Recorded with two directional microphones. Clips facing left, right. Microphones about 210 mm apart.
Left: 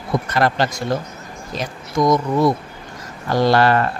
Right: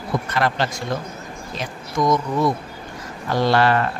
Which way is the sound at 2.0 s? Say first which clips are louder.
Left 3 dB; 40° left (ahead or behind).